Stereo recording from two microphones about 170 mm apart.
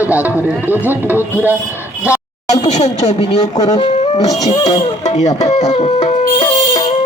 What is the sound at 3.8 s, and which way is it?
Speech, 35° left (ahead or behind).